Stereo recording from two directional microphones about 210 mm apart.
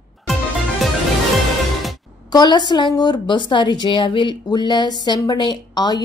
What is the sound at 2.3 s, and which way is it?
A woman's voice, 20° left (ahead or behind).